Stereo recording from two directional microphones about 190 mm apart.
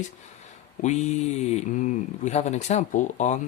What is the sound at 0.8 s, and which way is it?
Speech, 40° left (ahead or behind).